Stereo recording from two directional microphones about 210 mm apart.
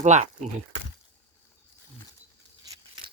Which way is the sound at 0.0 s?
35° right (ahead or behind).